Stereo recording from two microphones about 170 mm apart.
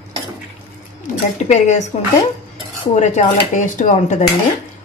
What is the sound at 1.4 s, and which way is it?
Speech, 45° left (ahead or behind).